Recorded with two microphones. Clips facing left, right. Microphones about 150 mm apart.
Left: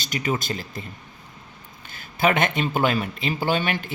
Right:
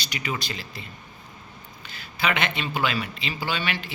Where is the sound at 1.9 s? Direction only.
45° left (ahead or behind).